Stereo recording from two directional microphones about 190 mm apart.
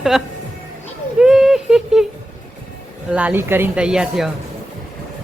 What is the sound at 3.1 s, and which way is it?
A woman's voice, 10° right (ahead or behind).